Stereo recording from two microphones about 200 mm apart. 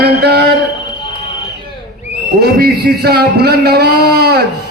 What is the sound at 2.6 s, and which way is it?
A man's voice, 55° right (ahead or behind).